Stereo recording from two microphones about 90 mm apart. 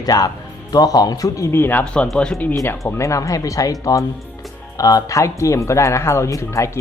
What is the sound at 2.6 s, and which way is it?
Speech, 35° left (ahead or behind).